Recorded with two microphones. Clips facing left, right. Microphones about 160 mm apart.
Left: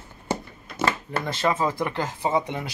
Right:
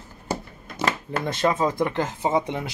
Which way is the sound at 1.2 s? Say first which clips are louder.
Right 2 dB; 20° right (ahead or behind).